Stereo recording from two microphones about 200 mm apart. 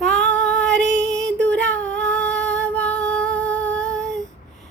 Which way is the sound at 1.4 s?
5° left (ahead or behind).